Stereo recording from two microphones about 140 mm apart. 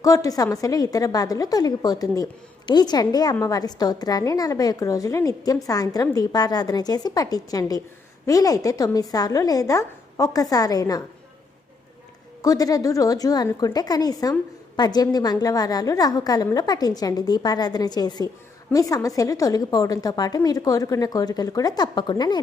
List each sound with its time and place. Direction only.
0.0 s a woman's voice: 25° left (ahead or behind)
12.4 s a woman's voice: 25° left (ahead or behind)